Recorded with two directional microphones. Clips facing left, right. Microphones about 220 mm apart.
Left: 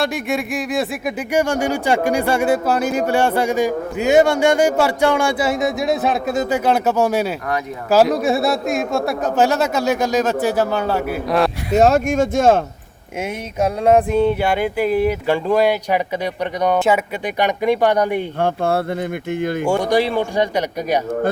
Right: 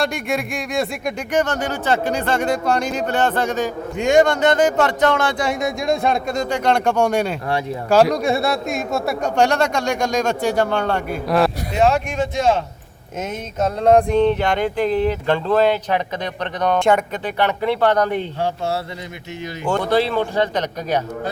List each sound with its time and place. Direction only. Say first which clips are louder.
0.0 s speech: left 1 dB; centre (ahead or behind)
11.7 s speech: left 4 dB; 45° left (ahead or behind)
13.2 s speech: left 2 dB; 10° left (ahead or behind)
18.3 s speech: left 4 dB; 55° left (ahead or behind)
19.6 s speech: even; 10° left (ahead or behind)